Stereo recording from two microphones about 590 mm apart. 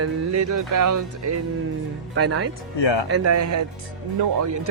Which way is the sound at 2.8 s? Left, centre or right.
Left.